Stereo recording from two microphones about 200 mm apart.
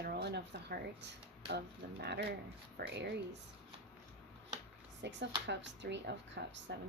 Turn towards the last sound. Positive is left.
turn(degrees=-60)  # may be behind; listen again after turning